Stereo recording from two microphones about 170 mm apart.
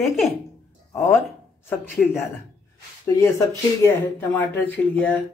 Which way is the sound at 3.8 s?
10° left (ahead or behind).